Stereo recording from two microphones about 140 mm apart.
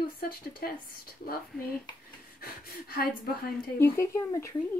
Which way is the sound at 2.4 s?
90° left.